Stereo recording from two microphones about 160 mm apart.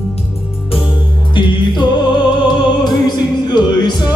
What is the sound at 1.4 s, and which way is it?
Music, 30° left (ahead or behind).